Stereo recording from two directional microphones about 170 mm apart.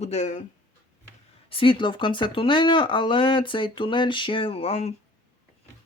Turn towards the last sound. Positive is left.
turn(degrees=40)  # may be behind; listen again after turning